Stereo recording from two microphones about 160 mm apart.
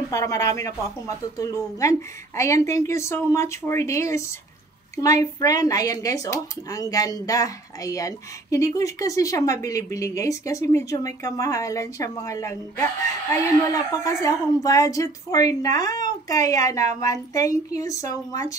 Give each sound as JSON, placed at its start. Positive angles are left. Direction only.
{"t": 0.1, "sound": "speech", "side_deg": 20}